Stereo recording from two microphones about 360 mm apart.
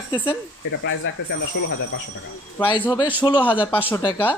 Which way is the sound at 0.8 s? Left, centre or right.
Left.